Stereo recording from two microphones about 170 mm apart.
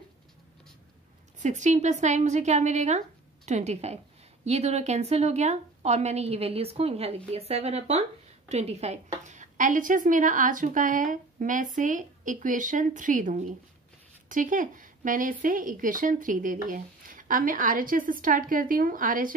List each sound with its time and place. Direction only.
1.4 s a woman's voice: 45° right (ahead or behind)